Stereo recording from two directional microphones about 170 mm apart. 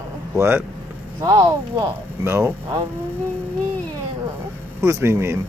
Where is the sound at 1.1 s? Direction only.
20° right (ahead or behind).